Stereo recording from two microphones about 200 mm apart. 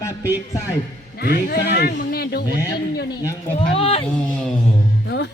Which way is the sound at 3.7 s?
30° left (ahead or behind).